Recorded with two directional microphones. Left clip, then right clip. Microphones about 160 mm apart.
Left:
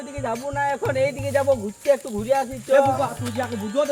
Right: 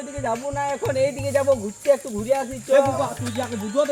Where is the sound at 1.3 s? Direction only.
5° right (ahead or behind).